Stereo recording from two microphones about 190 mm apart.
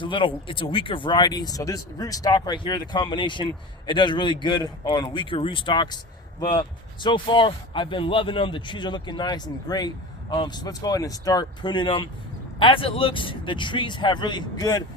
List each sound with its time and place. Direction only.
0.0 s speech: 25° left (ahead or behind)